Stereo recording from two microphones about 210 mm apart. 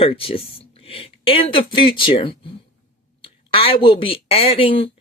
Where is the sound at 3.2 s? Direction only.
25° left (ahead or behind).